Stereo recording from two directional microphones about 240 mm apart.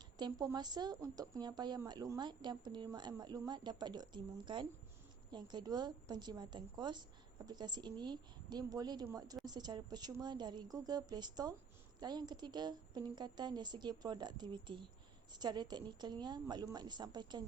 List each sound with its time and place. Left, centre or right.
0.2 s speech: centre